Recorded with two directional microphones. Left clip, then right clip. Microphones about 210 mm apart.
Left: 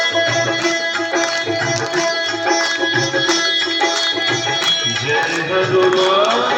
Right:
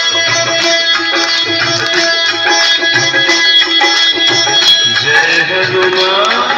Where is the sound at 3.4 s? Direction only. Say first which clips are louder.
Right 8 dB; 15° right (ahead or behind).